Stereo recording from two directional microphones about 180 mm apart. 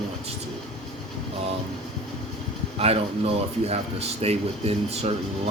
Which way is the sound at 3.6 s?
35° right (ahead or behind).